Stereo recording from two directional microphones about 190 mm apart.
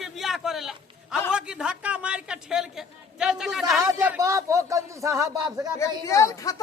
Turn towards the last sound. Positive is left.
turn(degrees=20)  # may be behind; listen again after turning